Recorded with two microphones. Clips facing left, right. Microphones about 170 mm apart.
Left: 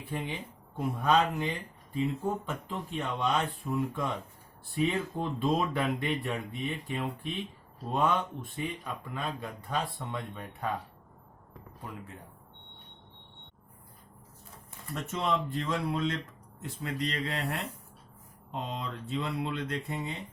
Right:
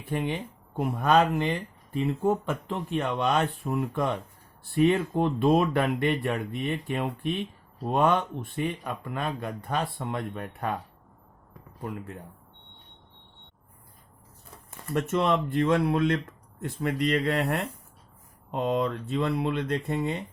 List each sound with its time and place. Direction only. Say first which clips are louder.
0.1 s speech: right 7 dB; 60° right (ahead or behind)
15.1 s speech: right 5 dB; 65° right (ahead or behind)